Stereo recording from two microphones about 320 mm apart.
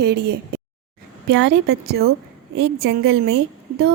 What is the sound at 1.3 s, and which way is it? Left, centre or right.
A woman's voice, right.